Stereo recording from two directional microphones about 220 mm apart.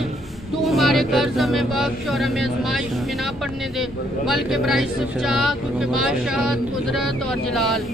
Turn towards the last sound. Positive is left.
turn(degrees=0)  # may be behind; listen again after turning